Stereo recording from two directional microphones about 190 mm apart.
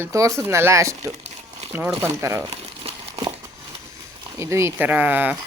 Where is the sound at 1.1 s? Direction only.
35° right (ahead or behind).